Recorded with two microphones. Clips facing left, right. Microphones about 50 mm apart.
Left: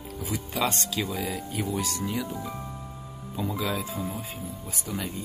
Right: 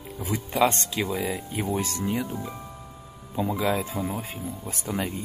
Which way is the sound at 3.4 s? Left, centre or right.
Right.